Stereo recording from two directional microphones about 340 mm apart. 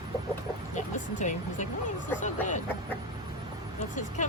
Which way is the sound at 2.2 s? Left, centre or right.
Left.